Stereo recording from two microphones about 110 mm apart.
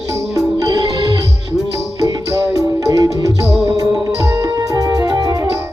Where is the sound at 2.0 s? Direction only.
30° right (ahead or behind).